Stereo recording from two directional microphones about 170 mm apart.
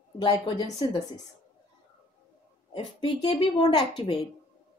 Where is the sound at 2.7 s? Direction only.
30° left (ahead or behind).